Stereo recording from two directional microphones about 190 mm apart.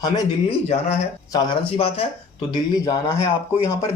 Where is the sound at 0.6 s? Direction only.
35° left (ahead or behind); by 3.7 s 15° left (ahead or behind).